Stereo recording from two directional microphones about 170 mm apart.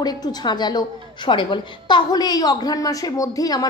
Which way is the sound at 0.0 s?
25° left (ahead or behind).